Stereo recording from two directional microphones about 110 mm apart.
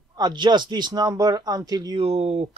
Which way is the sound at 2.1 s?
85° right.